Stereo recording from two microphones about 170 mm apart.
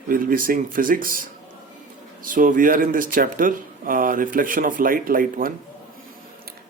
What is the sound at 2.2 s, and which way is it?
Speech, 55° right (ahead or behind).